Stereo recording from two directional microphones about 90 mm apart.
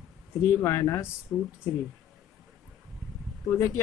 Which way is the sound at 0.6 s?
35° left (ahead or behind).